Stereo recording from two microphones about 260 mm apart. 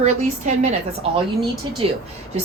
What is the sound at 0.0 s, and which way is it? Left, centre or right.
A woman's voice, right.